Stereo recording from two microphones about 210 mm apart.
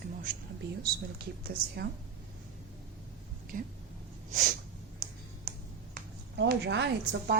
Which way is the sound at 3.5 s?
40° right (ahead or behind).